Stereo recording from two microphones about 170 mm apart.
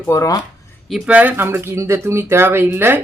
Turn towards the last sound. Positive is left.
turn(degrees=-10)  # may be behind; listen again after turning